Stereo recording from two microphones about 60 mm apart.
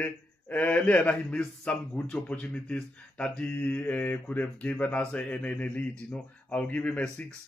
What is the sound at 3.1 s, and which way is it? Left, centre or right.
Mantra, centre.